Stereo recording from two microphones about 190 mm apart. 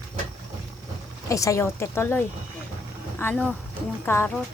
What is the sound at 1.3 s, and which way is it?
A woman's voice, 15° left (ahead or behind).